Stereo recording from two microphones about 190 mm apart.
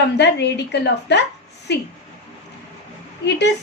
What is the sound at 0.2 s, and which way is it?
A woman's voice, 65° left (ahead or behind).